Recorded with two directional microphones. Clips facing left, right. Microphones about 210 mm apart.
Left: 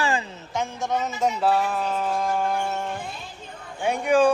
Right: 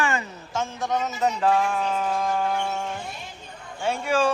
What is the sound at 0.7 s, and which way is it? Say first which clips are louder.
Speech: even; 10° left (ahead or behind).